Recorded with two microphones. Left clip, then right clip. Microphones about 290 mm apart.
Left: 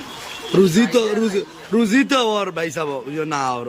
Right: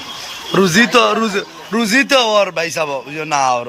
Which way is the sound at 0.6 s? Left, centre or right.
Centre.